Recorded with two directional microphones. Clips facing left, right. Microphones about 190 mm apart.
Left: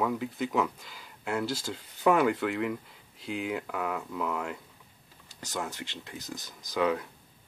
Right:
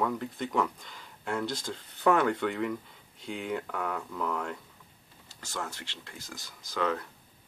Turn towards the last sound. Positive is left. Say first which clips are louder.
# left 3 dB
turn(degrees=15)  # may be behind; listen again after turning